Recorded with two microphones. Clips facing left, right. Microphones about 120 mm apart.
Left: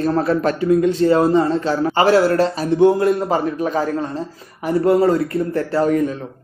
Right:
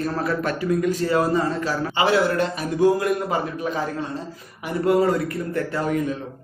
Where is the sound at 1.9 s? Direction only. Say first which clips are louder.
Left 5 dB; 40° left (ahead or behind).